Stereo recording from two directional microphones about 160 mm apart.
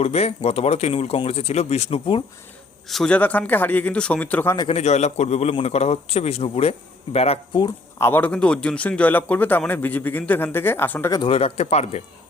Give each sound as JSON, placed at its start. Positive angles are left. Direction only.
{"t": 0.0, "sound": "a man's voice", "side_deg": 40}
{"t": 2.8, "sound": "a man's voice", "side_deg": 0}
{"t": 4.7, "sound": "a man's voice", "side_deg": 45}
{"t": 7.9, "sound": "a man's voice", "side_deg": 15}
{"t": 11.3, "sound": "a man's voice", "side_deg": 40}